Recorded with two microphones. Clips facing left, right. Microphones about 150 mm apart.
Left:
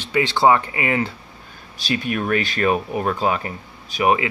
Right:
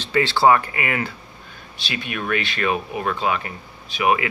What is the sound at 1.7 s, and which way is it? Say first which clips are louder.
Speech: left 6 dB; 40° left (ahead or behind).